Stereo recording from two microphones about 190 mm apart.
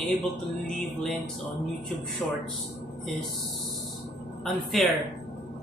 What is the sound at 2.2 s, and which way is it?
Music, centre (ahead or behind).